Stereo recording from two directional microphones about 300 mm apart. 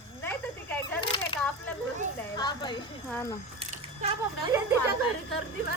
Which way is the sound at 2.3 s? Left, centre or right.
Centre.